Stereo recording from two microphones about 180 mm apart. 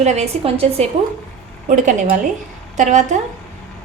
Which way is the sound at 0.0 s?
40° right (ahead or behind).